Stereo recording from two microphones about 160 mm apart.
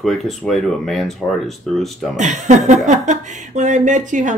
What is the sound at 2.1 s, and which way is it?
A woman's voice, 50° right (ahead or behind).